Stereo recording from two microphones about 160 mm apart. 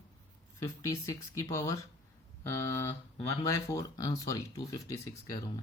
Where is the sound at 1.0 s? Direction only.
20° left (ahead or behind).